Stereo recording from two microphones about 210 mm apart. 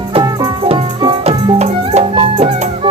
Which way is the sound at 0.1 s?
25° right (ahead or behind).